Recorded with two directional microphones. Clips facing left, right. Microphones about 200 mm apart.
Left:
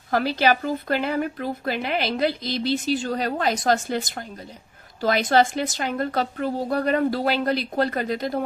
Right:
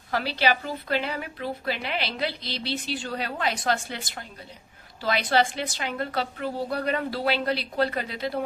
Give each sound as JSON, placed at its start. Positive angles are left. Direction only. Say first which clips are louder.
{"t": 0.1, "sound": "speech", "louder": "left 5 dB", "side_deg": 45}